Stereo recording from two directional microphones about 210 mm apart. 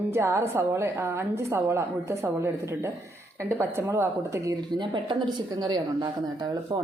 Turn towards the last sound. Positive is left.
turn(degrees=-20)  # may be behind; listen again after turning